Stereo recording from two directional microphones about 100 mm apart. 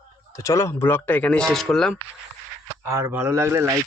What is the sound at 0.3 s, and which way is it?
Speech, 30° left (ahead or behind).